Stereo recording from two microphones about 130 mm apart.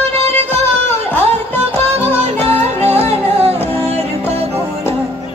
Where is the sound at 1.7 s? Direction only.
55° right (ahead or behind).